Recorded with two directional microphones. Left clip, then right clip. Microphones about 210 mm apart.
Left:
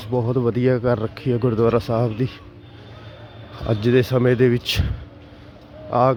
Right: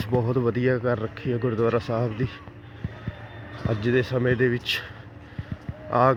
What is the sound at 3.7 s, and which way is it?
Speech, 35° left (ahead or behind).